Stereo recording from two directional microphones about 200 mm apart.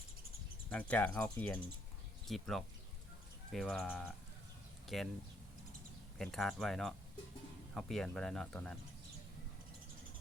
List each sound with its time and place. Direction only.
0.7 s speech: 5° left (ahead or behind)
6.1 s speech: centre (ahead or behind)